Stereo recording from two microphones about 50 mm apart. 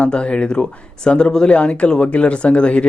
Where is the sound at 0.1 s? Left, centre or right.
Left.